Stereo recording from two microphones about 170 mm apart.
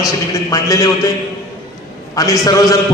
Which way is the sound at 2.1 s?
20° left (ahead or behind).